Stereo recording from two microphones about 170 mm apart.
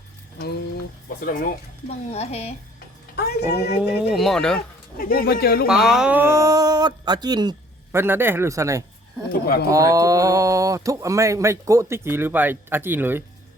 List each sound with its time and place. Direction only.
1.2 s speech: 55° left (ahead or behind)
2.0 s a woman's voice: 40° left (ahead or behind)
3.2 s a sound: 75° left (ahead or behind)
3.5 s speech: 70° left (ahead or behind)
4.1 s speech: centre (ahead or behind)
4.9 s speech: 60° left (ahead or behind)
5.6 s speech: 5° right (ahead or behind); by 7.5 s 25° right (ahead or behind)
7.9 s speech: 15° right (ahead or behind)
9.3 s speech: 60° left (ahead or behind)
9.6 s speech: 20° right (ahead or behind)